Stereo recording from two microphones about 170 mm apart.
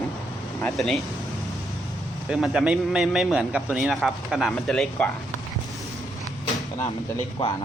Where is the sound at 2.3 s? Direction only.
5° right (ahead or behind).